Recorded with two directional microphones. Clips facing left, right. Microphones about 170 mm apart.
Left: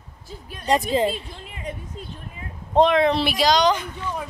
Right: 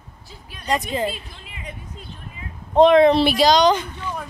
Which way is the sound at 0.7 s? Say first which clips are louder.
Left 3 dB; 30° left (ahead or behind).